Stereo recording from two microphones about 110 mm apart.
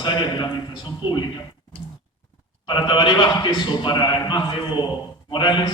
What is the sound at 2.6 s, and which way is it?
A man's voice, 45° left (ahead or behind).